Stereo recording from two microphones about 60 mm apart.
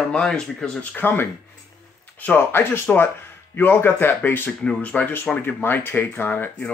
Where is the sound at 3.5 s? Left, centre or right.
Left.